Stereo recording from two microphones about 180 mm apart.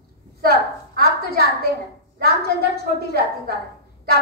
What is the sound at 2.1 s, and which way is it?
A woman's voice, 60° right (ahead or behind).